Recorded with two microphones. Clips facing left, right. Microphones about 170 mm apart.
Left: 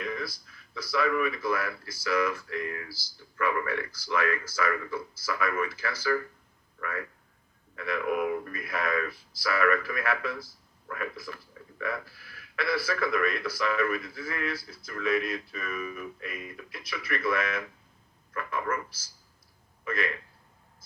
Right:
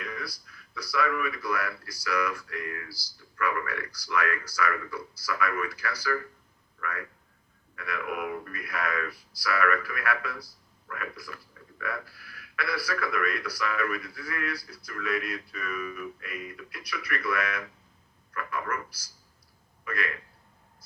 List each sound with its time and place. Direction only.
0.0 s speech: 25° left (ahead or behind)
6.7 s a sound: 25° left (ahead or behind)
7.8 s a man's voice: 25° left (ahead or behind)